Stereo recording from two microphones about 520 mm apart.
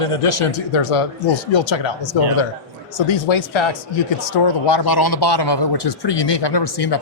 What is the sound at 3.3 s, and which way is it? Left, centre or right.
Speech, left.